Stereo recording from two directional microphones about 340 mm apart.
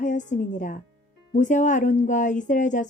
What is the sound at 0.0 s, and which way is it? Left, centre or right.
A woman's voice, left.